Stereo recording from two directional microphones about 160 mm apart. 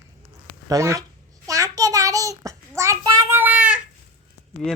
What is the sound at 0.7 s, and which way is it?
Speech, 20° right (ahead or behind).